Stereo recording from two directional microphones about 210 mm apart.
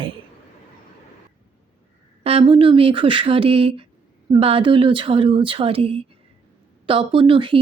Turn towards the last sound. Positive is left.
turn(degrees=-25)  # may be behind; listen again after turning